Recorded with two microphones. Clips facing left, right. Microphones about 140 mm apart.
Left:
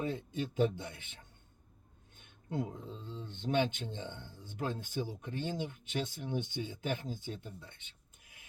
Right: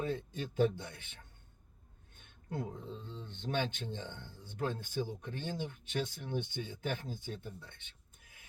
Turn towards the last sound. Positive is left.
turn(degrees=15)  # may be behind; listen again after turning